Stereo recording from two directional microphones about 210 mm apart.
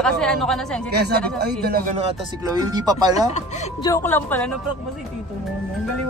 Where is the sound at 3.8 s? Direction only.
10° left (ahead or behind).